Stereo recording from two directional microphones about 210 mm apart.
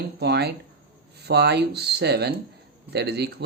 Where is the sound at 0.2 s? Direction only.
50° right (ahead or behind).